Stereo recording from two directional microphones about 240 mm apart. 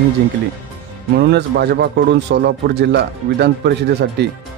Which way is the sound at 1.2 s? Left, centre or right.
Right.